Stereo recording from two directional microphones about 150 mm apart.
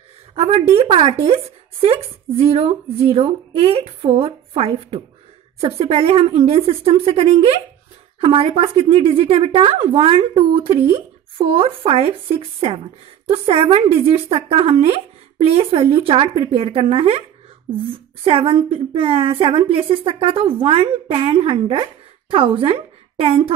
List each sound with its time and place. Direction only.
0.4 s speech: 40° right (ahead or behind)
18.2 s a woman's voice: 40° right (ahead or behind)